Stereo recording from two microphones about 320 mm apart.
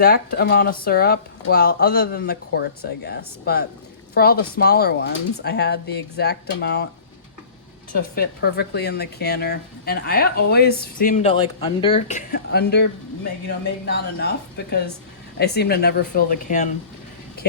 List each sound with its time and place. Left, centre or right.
0.0 s speech: left
8.1 s speech: left